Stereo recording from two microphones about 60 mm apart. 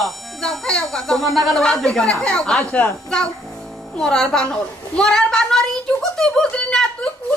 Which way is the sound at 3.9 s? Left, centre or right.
Centre.